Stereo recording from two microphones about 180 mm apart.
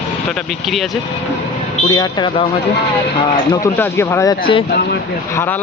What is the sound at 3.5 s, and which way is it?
Speech, 15° left (ahead or behind).